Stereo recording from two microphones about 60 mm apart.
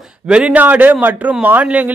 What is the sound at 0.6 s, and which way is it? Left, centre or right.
A man's voice, right.